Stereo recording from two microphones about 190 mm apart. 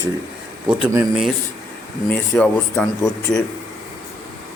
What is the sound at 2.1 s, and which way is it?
Speech, 5° left (ahead or behind).